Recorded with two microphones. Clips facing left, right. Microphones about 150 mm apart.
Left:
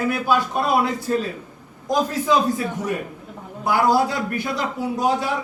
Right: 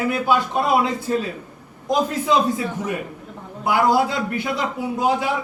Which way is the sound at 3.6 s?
20° right (ahead or behind).